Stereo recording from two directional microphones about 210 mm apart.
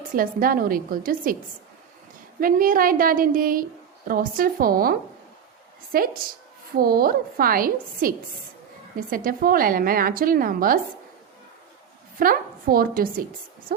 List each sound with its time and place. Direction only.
0.1 s speech: 40° right (ahead or behind)
2.4 s a woman's voice: 40° right (ahead or behind)
12.2 s a woman's voice: 45° right (ahead or behind)